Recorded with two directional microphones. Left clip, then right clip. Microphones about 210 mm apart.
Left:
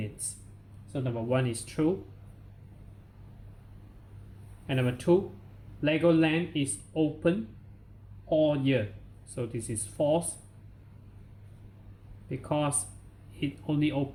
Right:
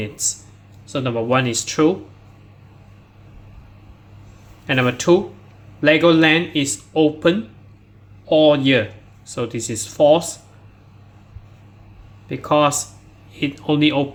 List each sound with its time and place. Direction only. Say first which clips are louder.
1.0 s speech: right 12 dB; 25° right (ahead or behind)
4.6 s speech: right 12 dB; 30° right (ahead or behind)
12.3 s speech: right 15 dB; 25° right (ahead or behind)